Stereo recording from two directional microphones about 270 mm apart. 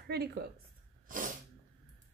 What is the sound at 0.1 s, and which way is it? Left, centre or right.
Speech, right.